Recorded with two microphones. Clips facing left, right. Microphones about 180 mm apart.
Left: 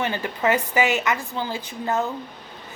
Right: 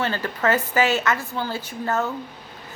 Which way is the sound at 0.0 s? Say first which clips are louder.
Even; 15° left (ahead or behind).